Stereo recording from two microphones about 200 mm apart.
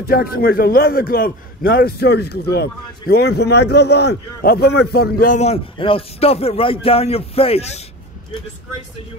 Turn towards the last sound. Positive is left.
turn(degrees=30)  # may be behind; listen again after turning